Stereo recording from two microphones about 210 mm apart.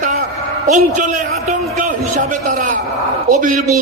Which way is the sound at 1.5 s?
35° right (ahead or behind).